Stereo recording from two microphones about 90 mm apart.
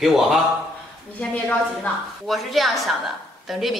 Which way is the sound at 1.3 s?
15° left (ahead or behind).